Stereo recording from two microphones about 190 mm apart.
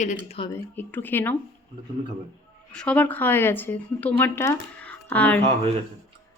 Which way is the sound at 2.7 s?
5° left (ahead or behind).